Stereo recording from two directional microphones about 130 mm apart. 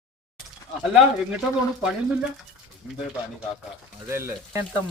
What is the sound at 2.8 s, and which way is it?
Speech, 10° right (ahead or behind).